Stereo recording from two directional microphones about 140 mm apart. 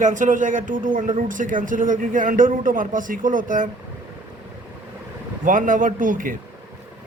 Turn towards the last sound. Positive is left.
turn(degrees=-70)  # may be behind; listen again after turning